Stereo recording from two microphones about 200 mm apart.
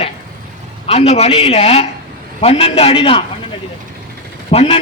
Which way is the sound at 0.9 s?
30° left (ahead or behind).